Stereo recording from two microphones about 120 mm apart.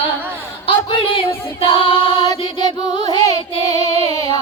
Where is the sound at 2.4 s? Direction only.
45° left (ahead or behind).